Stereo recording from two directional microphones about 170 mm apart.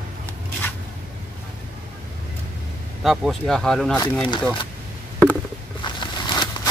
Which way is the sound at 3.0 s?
Centre (ahead or behind).